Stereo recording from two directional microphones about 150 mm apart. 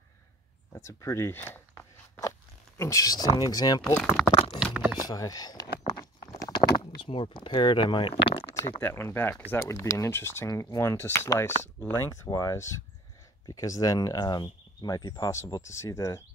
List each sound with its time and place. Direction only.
0.7 s speech: 20° left (ahead or behind)
3.8 s speech: 10° left (ahead or behind)
5.0 s speech: 25° left (ahead or behind)
5.9 s a sound: 25° left (ahead or behind)
8.7 s speech: 15° left (ahead or behind)